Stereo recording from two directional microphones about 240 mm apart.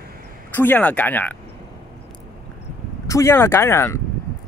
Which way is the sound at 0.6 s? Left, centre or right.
Centre.